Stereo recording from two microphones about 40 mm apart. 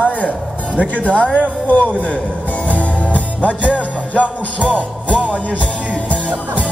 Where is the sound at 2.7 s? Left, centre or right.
Left.